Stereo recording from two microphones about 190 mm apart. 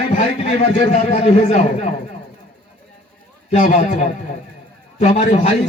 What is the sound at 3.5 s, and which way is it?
A man's voice, 40° left (ahead or behind).